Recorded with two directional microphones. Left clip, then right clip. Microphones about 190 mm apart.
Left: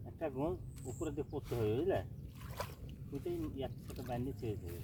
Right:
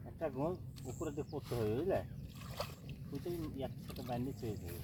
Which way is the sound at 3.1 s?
30° right (ahead or behind).